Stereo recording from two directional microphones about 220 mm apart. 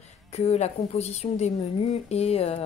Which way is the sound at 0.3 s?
30° left (ahead or behind).